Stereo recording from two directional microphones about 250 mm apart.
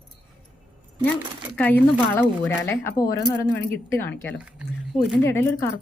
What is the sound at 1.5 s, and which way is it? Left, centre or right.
Speech, centre.